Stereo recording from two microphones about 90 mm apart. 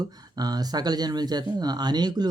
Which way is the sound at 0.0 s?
50° right (ahead or behind).